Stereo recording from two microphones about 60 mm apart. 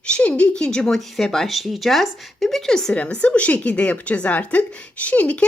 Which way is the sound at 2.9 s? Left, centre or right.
Centre.